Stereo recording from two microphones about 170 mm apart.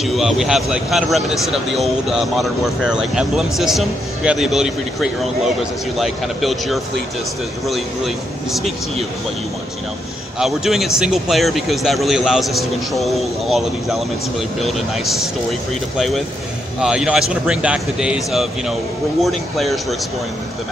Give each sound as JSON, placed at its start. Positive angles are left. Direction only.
{"t": 0.0, "sound": "speech", "side_deg": 0}
{"t": 10.4, "sound": "speech", "side_deg": 0}
{"t": 16.0, "sound": "speech", "side_deg": 0}